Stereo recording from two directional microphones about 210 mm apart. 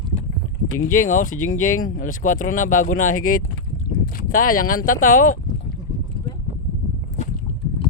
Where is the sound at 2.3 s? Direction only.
90° left.